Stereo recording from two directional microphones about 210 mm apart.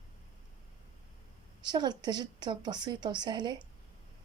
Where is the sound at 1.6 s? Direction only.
20° right (ahead or behind).